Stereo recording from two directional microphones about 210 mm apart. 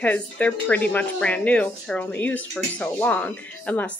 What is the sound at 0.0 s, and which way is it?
Speech, 5° left (ahead or behind).